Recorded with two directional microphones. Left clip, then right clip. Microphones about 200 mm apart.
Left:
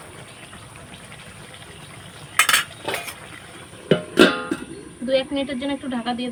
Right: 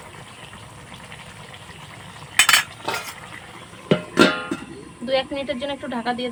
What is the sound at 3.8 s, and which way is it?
Music, centre (ahead or behind).